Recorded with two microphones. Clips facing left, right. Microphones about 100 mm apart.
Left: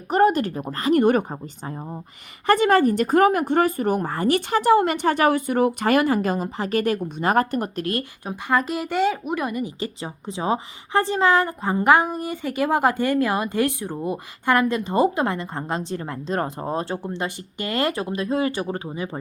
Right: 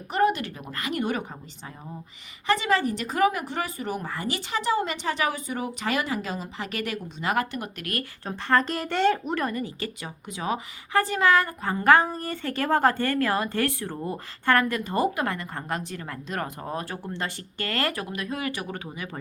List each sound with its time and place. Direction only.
0.1 s speech: 40° left (ahead or behind)
1.0 s speech: 50° left (ahead or behind)
8.2 s speech: 10° left (ahead or behind)
10.0 s a woman's voice: 30° left (ahead or behind)